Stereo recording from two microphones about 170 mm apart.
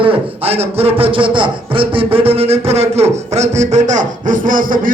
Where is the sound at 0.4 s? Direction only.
35° right (ahead or behind).